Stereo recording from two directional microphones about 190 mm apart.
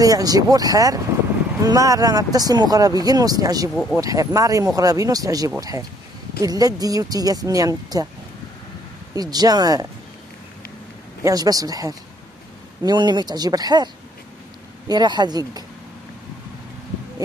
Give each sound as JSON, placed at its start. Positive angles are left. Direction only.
{"t": 0.0, "sound": "speech", "side_deg": -20}
{"t": 9.1, "sound": "speech", "side_deg": -20}
{"t": 11.2, "sound": "speech", "side_deg": -20}
{"t": 14.9, "sound": "speech", "side_deg": -20}